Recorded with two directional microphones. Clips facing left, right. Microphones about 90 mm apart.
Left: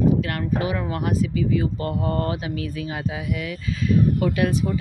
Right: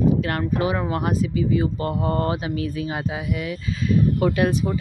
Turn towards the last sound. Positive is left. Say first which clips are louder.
# right 1 dB
turn(degrees=-25)  # may be behind; listen again after turning